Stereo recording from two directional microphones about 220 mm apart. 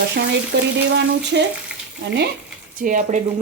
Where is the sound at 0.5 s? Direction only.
50° right (ahead or behind).